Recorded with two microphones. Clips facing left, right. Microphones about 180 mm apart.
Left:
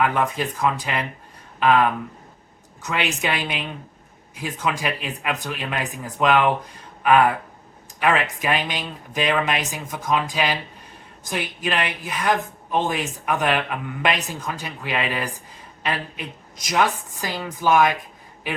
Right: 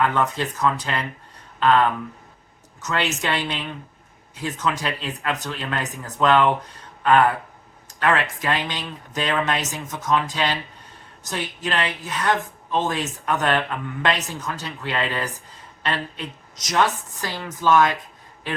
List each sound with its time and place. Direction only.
0.0 s speech: 10° left (ahead or behind)
2.9 s speech: 15° left (ahead or behind)